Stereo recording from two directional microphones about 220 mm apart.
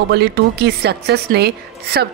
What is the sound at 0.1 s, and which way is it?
A woman's voice, 45° right (ahead or behind).